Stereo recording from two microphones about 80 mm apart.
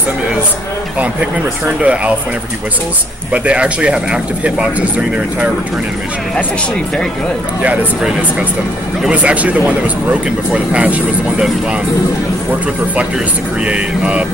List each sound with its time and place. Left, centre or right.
1.8 s speech: centre
3.4 s speech: centre
9.1 s speech: centre
13.7 s speech: centre